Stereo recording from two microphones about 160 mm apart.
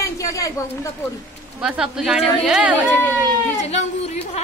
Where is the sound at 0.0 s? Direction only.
20° left (ahead or behind).